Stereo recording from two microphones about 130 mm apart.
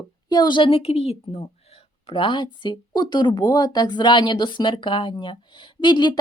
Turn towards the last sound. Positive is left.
turn(degrees=35)  # may be behind; listen again after turning